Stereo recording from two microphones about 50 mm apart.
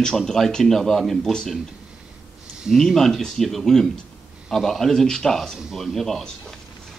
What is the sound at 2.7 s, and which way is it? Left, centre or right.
Speech, centre.